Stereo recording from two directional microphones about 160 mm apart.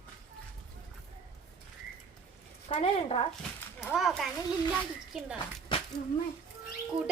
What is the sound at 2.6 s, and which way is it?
Speech, 40° left (ahead or behind).